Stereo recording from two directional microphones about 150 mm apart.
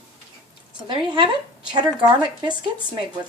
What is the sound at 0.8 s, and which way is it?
A woman's voice, 30° right (ahead or behind).